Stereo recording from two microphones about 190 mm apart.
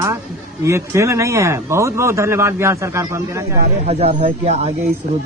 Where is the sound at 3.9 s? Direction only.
35° right (ahead or behind).